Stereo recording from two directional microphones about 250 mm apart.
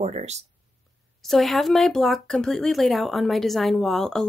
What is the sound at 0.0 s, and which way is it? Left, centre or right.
Speech, right.